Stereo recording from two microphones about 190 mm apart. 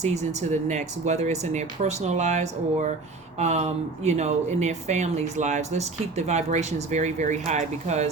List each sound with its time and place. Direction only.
0.0 s speech: 35° right (ahead or behind)